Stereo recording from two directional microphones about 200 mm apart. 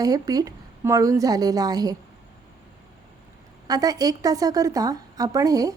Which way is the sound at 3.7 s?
20° right (ahead or behind).